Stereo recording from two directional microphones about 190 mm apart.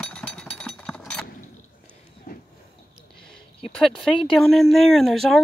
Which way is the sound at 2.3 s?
50° left (ahead or behind).